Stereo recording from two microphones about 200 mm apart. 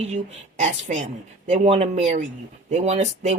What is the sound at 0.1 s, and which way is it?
Speech, 35° right (ahead or behind).